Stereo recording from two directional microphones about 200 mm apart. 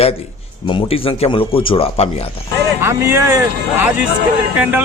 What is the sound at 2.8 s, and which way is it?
Speech, 10° right (ahead or behind).